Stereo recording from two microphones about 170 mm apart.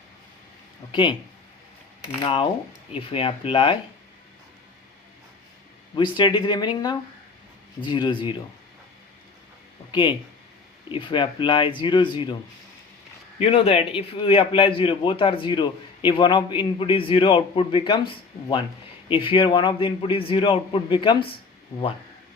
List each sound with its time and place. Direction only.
0.9 s speech: 30° left (ahead or behind)
2.2 s a man's voice: 35° left (ahead or behind)
6.0 s speech: 30° left (ahead or behind)
9.9 s speech: 30° left (ahead or behind)
13.4 s a man's voice: 35° left (ahead or behind)
19.0 s a man's voice: 30° left (ahead or behind)